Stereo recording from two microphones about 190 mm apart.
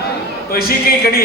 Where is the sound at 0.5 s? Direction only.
50° left (ahead or behind).